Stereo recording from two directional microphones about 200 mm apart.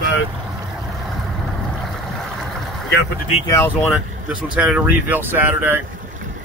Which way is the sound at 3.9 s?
5° right (ahead or behind).